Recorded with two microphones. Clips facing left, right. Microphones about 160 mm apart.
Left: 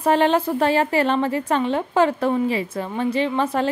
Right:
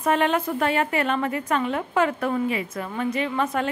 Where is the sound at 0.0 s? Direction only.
30° left (ahead or behind).